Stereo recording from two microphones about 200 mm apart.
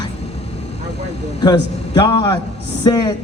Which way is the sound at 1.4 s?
20° left (ahead or behind).